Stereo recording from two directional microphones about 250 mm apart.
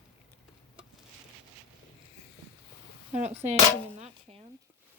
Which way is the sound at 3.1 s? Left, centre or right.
Right.